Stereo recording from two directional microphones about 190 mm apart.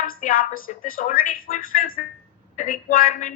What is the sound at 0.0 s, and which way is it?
A woman's voice, 45° left (ahead or behind).